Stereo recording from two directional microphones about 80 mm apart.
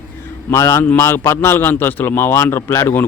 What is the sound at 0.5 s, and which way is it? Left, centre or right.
A man's voice, left.